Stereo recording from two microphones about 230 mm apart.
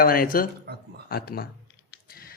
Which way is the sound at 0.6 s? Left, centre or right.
Right.